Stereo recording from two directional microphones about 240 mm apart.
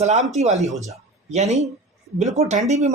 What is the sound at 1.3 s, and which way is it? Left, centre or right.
Speech, right.